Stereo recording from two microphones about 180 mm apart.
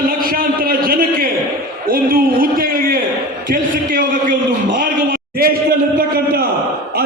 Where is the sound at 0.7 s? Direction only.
55° right (ahead or behind).